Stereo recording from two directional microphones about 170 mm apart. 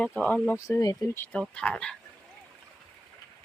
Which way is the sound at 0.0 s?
5° left (ahead or behind).